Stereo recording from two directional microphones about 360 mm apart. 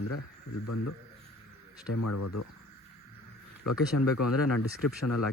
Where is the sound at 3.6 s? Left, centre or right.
Left.